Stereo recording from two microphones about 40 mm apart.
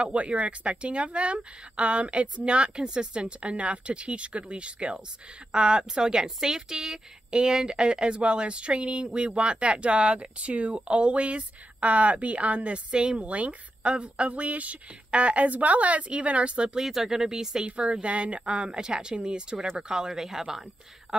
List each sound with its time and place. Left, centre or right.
0.0 s a woman's voice: right
16.7 s speech: centre
17.6 s speech: right; by 20.6 s centre